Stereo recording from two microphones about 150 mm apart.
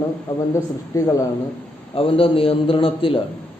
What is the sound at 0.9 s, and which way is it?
Speech, 20° left (ahead or behind).